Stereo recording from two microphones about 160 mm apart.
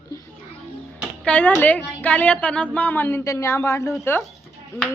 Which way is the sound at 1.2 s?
5° left (ahead or behind).